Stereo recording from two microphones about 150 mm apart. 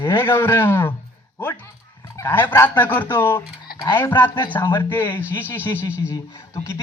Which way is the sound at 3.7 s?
75° left (ahead or behind).